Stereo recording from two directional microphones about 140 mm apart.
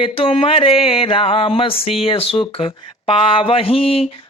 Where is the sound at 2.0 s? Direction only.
45° left (ahead or behind).